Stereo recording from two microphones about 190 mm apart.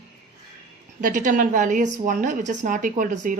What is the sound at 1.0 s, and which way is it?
A woman's voice, 45° right (ahead or behind).